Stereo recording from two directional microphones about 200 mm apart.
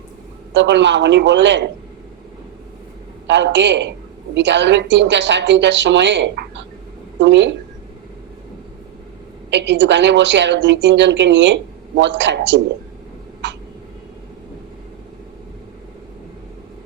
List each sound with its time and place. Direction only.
0.5 s a woman's voice: 60° right (ahead or behind)
3.2 s a woman's voice: 60° right (ahead or behind)
9.5 s a woman's voice: 60° right (ahead or behind)
13.4 s a sound: 65° right (ahead or behind)